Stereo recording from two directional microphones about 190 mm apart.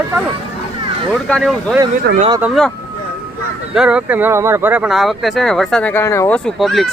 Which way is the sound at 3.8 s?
5° right (ahead or behind).